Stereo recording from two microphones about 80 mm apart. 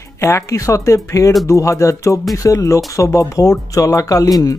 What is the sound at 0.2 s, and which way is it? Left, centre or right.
Speech, left.